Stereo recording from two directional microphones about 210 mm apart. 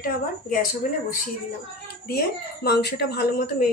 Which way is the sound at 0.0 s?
45° left (ahead or behind).